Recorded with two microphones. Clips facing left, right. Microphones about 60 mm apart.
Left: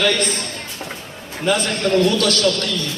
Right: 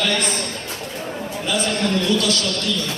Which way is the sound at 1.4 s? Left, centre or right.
Left.